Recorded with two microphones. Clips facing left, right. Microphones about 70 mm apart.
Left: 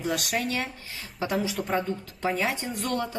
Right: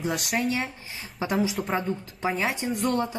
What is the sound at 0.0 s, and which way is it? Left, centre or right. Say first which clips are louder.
Speech: right 1 dB; centre.